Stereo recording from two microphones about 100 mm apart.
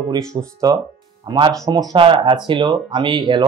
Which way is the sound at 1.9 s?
60° right (ahead or behind).